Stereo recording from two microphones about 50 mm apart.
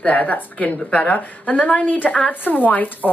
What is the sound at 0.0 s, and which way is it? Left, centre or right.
Speech, left.